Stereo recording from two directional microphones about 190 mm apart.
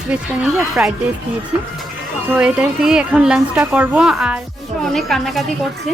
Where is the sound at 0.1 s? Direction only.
5° right (ahead or behind).